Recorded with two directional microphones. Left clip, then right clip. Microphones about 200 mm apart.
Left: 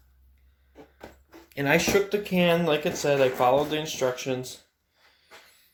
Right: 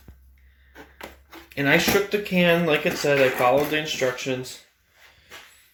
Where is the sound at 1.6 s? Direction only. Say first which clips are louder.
Right 3 dB; centre (ahead or behind).